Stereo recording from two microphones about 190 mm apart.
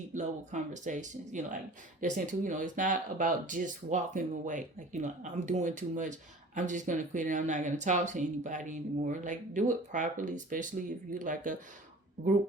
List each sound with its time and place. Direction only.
0.1 s speech: 40° right (ahead or behind)